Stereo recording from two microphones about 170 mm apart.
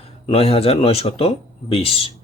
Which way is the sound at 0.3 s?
35° left (ahead or behind).